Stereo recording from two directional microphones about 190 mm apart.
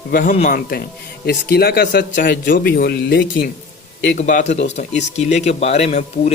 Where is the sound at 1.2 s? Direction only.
55° left (ahead or behind).